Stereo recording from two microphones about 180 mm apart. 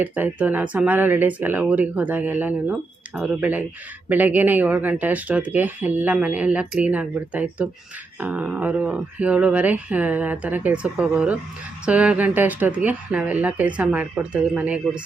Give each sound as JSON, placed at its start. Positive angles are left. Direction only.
{"t": 0.0, "sound": "speech", "side_deg": -10}